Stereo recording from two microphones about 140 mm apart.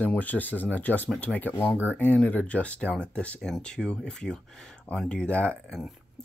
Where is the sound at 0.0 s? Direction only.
10° left (ahead or behind).